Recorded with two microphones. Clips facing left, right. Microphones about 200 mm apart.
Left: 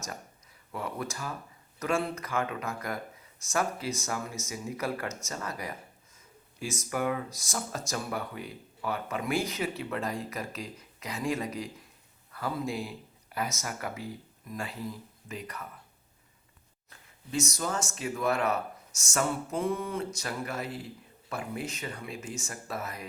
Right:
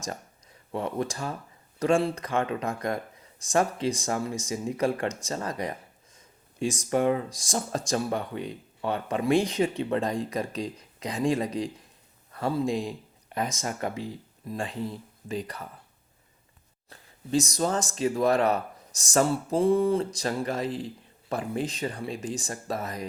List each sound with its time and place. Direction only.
0.7 s speech: 30° right (ahead or behind)
6.1 s a sound: 30° right (ahead or behind)
6.9 s speech: 30° right (ahead or behind)
16.9 s speech: 35° right (ahead or behind)